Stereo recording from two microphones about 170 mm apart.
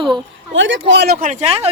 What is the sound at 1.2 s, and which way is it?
Speech, 35° right (ahead or behind).